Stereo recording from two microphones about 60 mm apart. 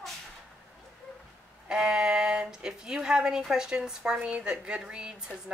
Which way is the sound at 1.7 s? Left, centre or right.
Centre.